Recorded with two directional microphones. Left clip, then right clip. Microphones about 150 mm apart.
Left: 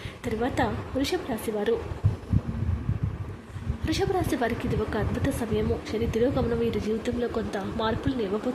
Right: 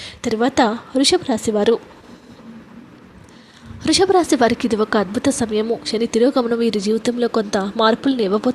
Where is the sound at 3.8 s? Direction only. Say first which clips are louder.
Right 12 dB; 45° right (ahead or behind).